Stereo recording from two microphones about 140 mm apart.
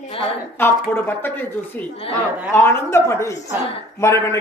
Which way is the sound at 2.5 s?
15° left (ahead or behind).